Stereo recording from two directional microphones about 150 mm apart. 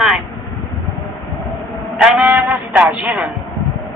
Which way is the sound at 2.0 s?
5° right (ahead or behind).